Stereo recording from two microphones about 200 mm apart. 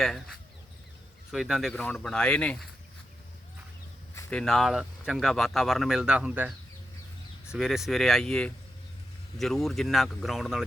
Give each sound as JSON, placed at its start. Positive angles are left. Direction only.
{"t": 1.3, "sound": "speech", "side_deg": 0}
{"t": 4.1, "sound": "speech", "side_deg": 10}
{"t": 7.5, "sound": "speech", "side_deg": 0}